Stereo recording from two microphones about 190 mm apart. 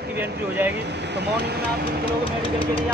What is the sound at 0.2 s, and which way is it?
Speech, 10° right (ahead or behind).